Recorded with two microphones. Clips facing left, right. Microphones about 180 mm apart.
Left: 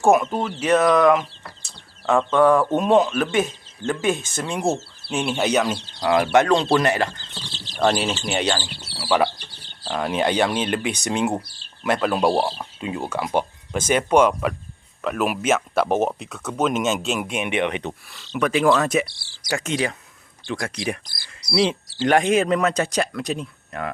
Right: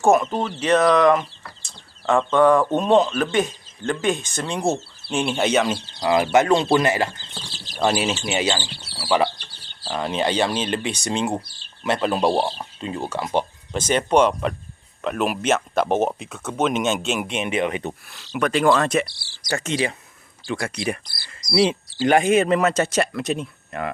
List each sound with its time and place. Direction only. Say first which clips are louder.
0.0 s speech: even; 10° left (ahead or behind)
7.5 s bird: left 1 dB; 10° right (ahead or behind)
8.1 s speech: even; 5° right (ahead or behind)
10.0 s speech: left 1 dB; 15° left (ahead or behind)
12.0 s speech: even; centre (ahead or behind)